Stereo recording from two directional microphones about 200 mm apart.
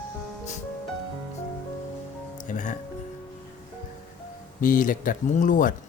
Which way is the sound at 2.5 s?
40° left (ahead or behind).